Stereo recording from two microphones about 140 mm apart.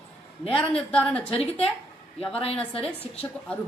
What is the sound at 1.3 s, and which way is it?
Speech, 45° left (ahead or behind).